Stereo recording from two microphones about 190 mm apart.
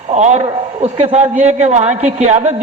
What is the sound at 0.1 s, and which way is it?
A man's voice, 35° right (ahead or behind).